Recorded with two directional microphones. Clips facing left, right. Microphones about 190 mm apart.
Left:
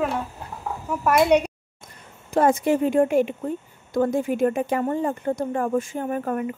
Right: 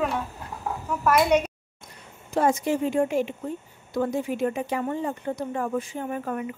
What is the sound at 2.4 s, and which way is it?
A woman's voice, 55° left (ahead or behind).